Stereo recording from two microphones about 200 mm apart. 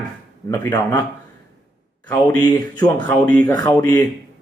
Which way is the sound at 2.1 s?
20° left (ahead or behind).